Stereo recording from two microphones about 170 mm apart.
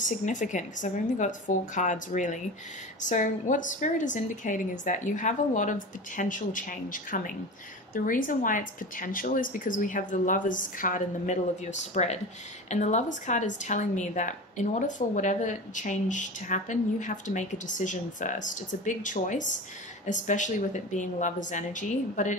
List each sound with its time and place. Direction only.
0.0 s a woman's voice: 50° left (ahead or behind)